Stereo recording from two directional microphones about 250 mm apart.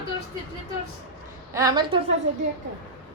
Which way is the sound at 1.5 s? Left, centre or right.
Centre.